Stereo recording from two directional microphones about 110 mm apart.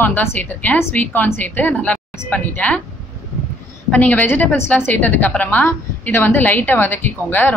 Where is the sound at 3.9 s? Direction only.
15° left (ahead or behind).